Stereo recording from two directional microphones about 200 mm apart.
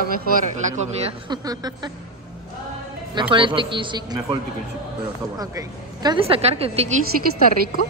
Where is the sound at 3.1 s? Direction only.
25° right (ahead or behind).